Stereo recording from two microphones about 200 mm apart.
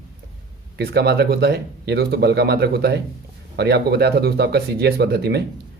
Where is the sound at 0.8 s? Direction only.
55° right (ahead or behind).